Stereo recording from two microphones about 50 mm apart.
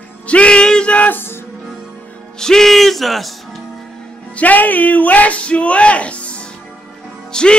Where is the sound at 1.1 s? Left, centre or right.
Left.